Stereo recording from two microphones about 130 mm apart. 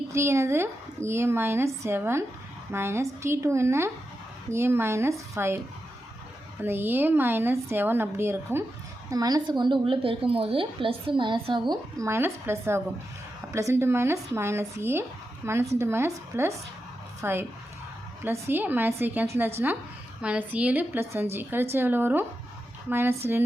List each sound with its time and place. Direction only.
0.1 s a woman's voice: 20° right (ahead or behind)
6.6 s a woman's voice: 15° right (ahead or behind)
9.0 s a woman's voice: 30° right (ahead or behind)
12.0 s a woman's voice: 20° right (ahead or behind)